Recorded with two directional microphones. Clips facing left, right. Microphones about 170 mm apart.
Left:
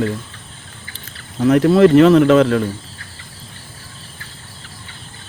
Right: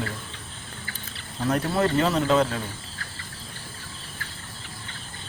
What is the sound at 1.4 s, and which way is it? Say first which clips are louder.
Speech: left 13 dB; 85° left.